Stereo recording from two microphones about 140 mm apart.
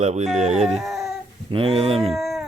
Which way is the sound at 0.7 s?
Centre (ahead or behind).